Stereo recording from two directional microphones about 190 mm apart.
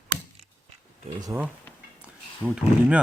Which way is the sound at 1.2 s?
15° right (ahead or behind).